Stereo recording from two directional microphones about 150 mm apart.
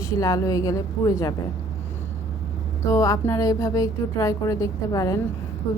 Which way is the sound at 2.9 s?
20° left (ahead or behind).